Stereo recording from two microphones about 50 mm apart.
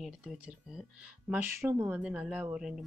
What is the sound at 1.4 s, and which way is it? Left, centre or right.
Speech, right.